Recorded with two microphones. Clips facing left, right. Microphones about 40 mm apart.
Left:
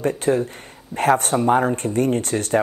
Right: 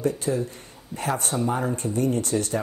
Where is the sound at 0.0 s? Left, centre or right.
Left.